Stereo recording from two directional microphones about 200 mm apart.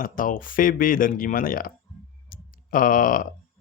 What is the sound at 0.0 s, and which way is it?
Speech, 45° left (ahead or behind).